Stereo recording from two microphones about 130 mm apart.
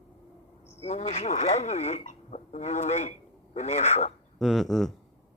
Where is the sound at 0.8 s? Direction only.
60° left (ahead or behind).